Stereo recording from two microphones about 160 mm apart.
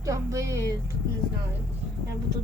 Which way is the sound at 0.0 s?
20° right (ahead or behind).